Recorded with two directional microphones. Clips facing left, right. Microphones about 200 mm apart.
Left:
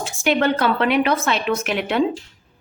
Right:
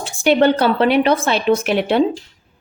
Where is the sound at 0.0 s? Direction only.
30° right (ahead or behind).